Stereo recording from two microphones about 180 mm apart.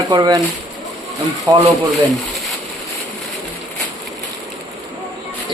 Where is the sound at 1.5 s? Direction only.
25° right (ahead or behind).